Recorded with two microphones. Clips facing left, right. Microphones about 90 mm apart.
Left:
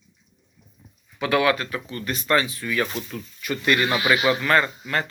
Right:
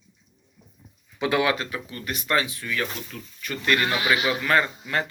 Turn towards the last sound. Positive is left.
turn(degrees=-10)  # may be behind; listen again after turning